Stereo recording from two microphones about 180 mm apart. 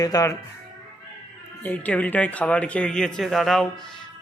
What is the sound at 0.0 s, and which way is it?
Speech, 20° left (ahead or behind).